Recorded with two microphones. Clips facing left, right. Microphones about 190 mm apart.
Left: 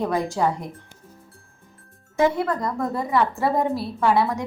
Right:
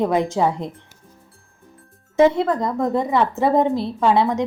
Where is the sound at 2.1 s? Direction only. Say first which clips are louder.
Right 5 dB; 20° right (ahead or behind).